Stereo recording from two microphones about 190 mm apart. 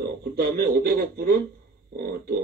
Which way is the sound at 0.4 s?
55° right (ahead or behind).